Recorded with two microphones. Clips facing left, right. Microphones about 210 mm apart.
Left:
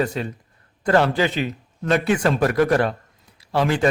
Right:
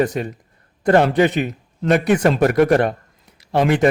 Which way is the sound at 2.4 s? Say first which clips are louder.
Right 3 dB; 25° right (ahead or behind).